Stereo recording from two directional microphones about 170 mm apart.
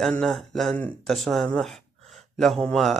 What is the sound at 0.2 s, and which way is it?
Speech, centre (ahead or behind).